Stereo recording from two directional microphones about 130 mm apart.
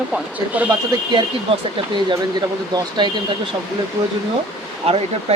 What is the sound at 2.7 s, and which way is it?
Speech, 35° right (ahead or behind).